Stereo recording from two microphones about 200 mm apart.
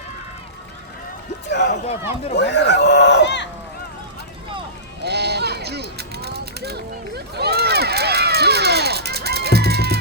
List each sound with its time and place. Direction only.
1.5 s speech: 60° left (ahead or behind)
5.0 s sheep: 55° right (ahead or behind)